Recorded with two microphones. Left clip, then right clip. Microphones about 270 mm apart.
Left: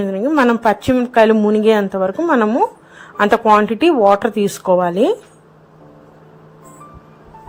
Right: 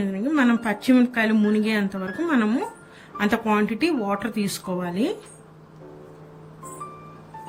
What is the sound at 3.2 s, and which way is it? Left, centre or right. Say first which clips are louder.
Speech: left 11 dB; left.